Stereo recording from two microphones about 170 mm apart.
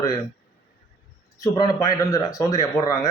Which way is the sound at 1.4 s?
20° left (ahead or behind).